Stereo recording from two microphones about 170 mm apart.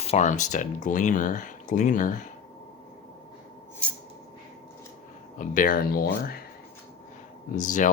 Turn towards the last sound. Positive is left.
turn(degrees=50)  # may be behind; listen again after turning